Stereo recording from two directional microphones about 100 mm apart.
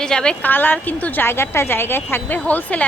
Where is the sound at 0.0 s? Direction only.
10° left (ahead or behind).